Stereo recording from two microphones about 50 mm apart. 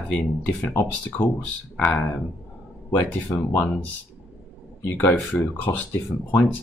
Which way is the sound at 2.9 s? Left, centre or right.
Left.